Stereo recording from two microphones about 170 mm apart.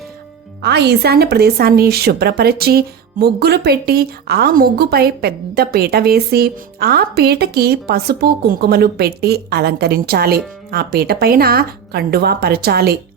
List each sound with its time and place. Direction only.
0.6 s speech: 80° right